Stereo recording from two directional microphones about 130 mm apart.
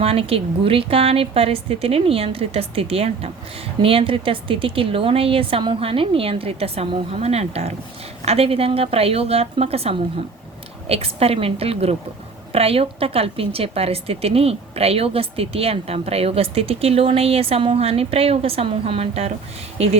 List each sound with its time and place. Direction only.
0.0 s a woman's voice: 50° right (ahead or behind)